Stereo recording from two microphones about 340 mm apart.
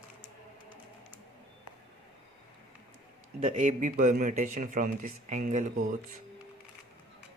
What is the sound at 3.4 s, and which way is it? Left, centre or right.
A man's voice, right.